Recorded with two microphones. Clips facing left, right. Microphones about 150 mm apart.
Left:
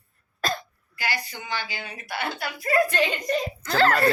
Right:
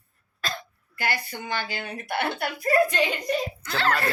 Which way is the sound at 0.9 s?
55° right (ahead or behind).